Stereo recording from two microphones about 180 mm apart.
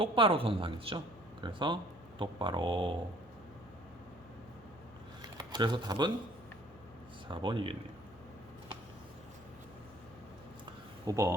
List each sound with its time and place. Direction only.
0.0 s speech: 30° right (ahead or behind)
5.4 s speech: 25° right (ahead or behind)
7.3 s speech: 25° right (ahead or behind)
11.0 s speech: 20° right (ahead or behind)